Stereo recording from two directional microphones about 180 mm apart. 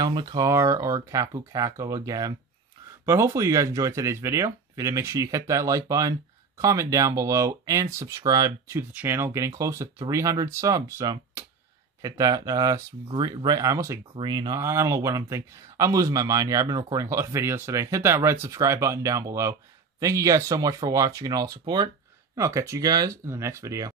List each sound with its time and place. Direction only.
0.0 s speech: 25° right (ahead or behind)